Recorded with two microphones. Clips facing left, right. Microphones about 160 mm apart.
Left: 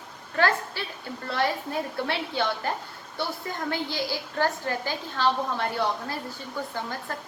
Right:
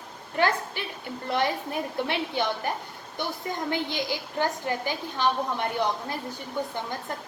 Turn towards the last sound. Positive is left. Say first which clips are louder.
# right 2 dB
turn(degrees=-20)  # may be behind; listen again after turning